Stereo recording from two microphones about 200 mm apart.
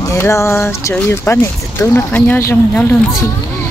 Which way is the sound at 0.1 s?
15° left (ahead or behind).